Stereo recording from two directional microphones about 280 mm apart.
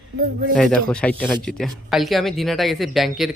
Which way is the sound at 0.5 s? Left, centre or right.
Centre.